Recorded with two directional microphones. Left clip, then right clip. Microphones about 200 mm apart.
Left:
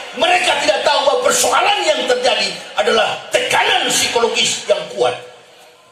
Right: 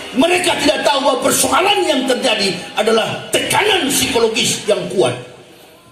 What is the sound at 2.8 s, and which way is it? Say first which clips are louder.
A man's voice: left 1 dB; 55° right (ahead or behind).